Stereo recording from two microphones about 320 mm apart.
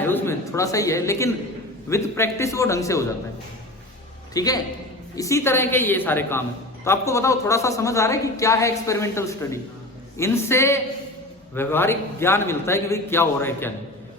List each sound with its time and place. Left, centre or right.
0.1 s a man's voice: centre
4.4 s a man's voice: centre